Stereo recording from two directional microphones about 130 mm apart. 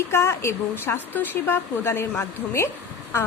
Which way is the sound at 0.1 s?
20° left (ahead or behind).